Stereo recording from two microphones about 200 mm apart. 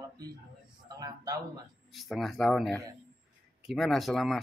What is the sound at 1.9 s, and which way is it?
Speech, centre (ahead or behind).